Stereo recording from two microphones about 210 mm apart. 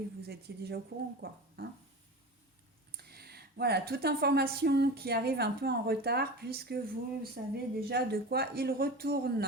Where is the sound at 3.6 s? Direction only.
50° right (ahead or behind).